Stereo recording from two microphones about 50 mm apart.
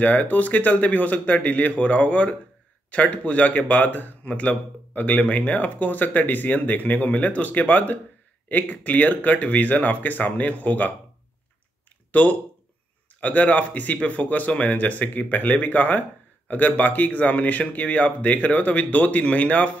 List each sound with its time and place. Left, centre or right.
0.0 s speech: left
12.1 s speech: left